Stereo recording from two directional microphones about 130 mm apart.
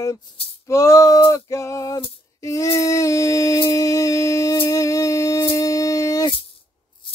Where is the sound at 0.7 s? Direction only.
25° left (ahead or behind).